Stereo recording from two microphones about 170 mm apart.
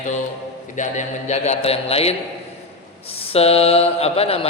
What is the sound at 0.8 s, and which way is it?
A man's voice, 45° left (ahead or behind).